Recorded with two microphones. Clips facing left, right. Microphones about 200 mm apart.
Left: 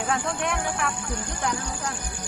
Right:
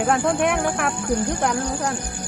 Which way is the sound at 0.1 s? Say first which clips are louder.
Right 7 dB; 60° right (ahead or behind).